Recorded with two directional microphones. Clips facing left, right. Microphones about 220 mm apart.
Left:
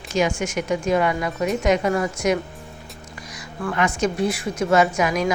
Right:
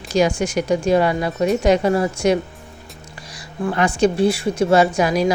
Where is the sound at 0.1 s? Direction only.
35° right (ahead or behind).